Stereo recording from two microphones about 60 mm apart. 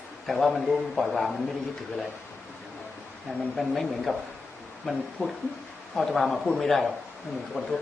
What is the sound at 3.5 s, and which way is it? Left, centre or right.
A man's voice, centre.